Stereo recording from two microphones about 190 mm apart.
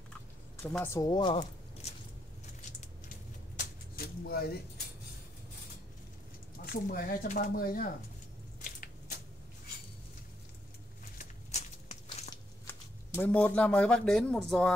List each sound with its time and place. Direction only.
0.6 s speech: 15° left (ahead or behind)
3.5 s a sound: 50° left (ahead or behind)
6.6 s speech: 50° left (ahead or behind)
11.5 s walk: 35° left (ahead or behind)
13.1 s speech: 10° left (ahead or behind)